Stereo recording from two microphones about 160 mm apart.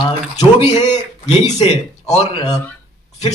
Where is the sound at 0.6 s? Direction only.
40° left (ahead or behind).